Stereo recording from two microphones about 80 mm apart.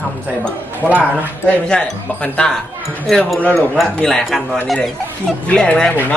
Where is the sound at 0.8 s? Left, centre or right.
Right.